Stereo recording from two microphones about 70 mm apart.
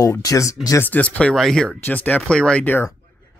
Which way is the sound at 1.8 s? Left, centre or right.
Left.